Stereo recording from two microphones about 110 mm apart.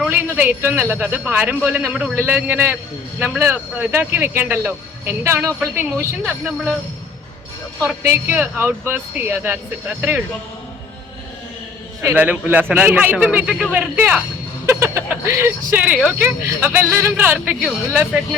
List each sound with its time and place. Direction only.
0.1 s speech: 15° right (ahead or behind)
8.0 s speech: 25° right (ahead or behind)
12.0 s speech: 15° right (ahead or behind)
13.7 s speech: 15° right (ahead or behind)